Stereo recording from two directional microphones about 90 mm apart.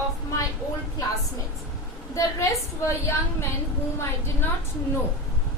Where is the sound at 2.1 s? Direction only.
35° left (ahead or behind).